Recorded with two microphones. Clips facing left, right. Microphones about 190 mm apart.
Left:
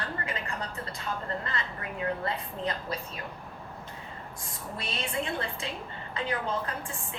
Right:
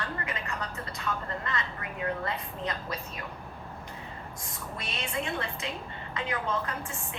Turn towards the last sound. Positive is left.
turn(degrees=30)  # may be behind; listen again after turning